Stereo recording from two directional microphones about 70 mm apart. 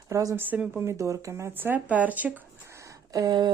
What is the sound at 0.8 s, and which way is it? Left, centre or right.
Speech, right.